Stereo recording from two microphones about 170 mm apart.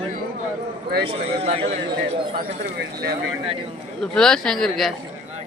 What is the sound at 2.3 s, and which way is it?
Speech, 60° right (ahead or behind).